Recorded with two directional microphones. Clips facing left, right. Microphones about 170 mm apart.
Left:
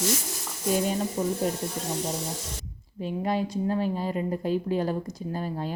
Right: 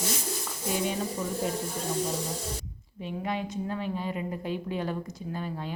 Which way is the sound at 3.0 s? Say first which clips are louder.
Left 5 dB; 35° left (ahead or behind).